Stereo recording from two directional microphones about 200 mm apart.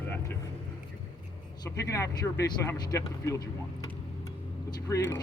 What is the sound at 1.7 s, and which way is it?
Speech, 15° left (ahead or behind).